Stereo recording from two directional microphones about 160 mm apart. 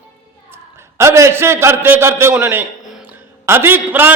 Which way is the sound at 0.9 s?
15° right (ahead or behind).